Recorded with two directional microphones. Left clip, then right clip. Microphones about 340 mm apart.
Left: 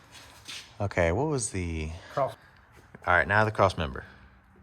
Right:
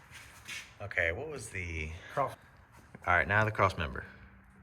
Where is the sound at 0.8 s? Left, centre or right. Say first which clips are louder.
Left 6 dB; centre.